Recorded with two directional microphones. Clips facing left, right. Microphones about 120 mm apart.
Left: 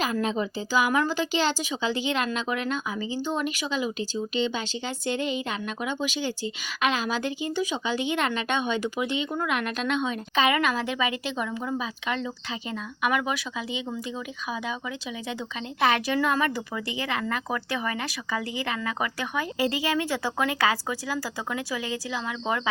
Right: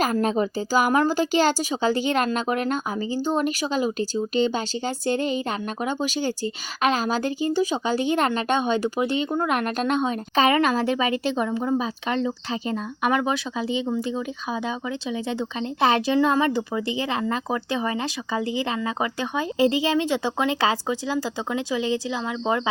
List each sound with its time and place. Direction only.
0.0 s a woman's voice: 45° right (ahead or behind)
15.3 s speech: 30° right (ahead or behind)